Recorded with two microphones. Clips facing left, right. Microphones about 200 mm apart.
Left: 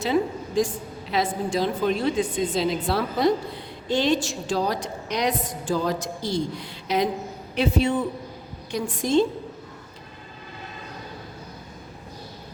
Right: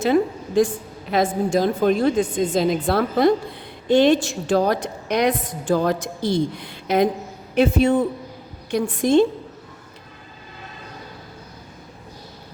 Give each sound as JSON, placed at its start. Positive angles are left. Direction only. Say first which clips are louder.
{"t": 0.0, "sound": "a woman's voice", "louder": "right 5 dB", "side_deg": -55}